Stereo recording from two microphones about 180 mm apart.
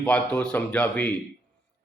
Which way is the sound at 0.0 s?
5° left (ahead or behind).